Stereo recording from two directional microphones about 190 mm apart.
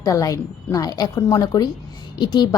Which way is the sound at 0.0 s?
15° left (ahead or behind).